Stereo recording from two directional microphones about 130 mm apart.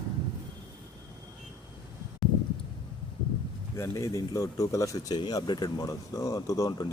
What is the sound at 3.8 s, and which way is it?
Speech, 25° left (ahead or behind).